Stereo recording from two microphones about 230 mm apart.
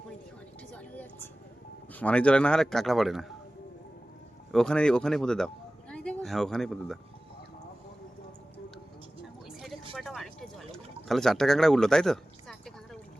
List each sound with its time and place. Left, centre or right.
1.9 s speech: centre
4.5 s speech: centre
9.5 s a sound: centre